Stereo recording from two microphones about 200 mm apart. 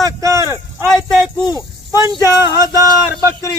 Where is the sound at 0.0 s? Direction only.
15° right (ahead or behind).